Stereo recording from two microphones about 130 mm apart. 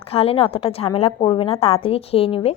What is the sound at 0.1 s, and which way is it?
A woman's voice, 45° left (ahead or behind).